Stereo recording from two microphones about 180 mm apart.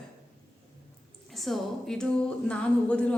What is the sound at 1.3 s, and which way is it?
A woman's voice, centre (ahead or behind).